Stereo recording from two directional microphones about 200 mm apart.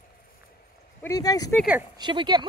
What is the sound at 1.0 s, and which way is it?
Speech, 15° left (ahead or behind).